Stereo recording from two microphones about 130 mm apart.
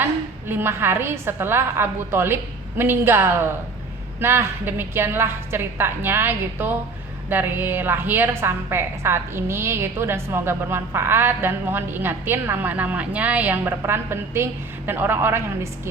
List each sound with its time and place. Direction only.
0.0 s a woman's voice: 15° right (ahead or behind)